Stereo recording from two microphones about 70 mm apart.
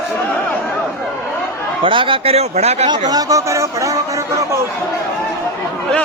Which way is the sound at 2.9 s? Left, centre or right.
Right.